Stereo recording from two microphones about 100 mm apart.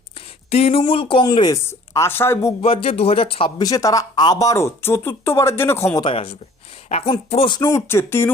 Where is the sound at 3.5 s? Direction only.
35° left (ahead or behind).